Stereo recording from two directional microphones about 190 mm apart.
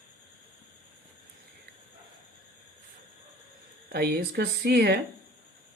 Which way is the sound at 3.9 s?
55° right (ahead or behind).